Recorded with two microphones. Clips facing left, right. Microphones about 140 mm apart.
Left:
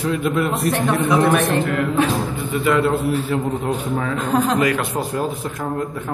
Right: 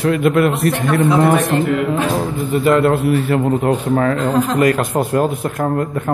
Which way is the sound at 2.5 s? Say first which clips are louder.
Right 5 dB; 50° right (ahead or behind).